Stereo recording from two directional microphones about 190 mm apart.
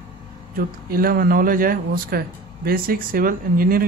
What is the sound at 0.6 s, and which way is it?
Speech, 50° right (ahead or behind).